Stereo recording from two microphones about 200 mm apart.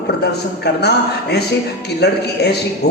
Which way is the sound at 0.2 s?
55° left (ahead or behind).